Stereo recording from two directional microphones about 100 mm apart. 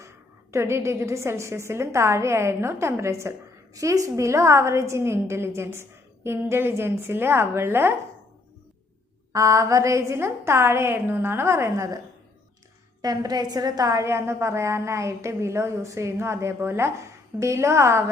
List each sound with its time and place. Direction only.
0.5 s a woman's voice: 25° right (ahead or behind)
9.3 s a woman's voice: 35° right (ahead or behind)
13.0 s a woman's voice: 40° right (ahead or behind)